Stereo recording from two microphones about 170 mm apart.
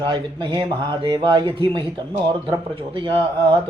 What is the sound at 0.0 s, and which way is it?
Speech, 30° right (ahead or behind).